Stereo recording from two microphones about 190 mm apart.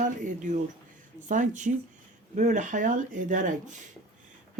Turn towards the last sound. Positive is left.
turn(degrees=-40)  # may be behind; listen again after turning